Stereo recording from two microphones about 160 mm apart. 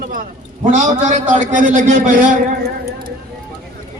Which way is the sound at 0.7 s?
50° right (ahead or behind).